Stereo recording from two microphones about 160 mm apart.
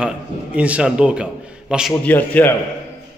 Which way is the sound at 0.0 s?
5° right (ahead or behind).